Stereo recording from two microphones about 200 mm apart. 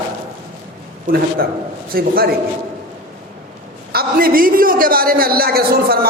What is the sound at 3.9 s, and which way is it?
A man's voice, 50° right (ahead or behind).